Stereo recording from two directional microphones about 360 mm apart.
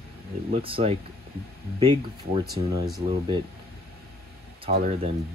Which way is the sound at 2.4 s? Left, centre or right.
Centre.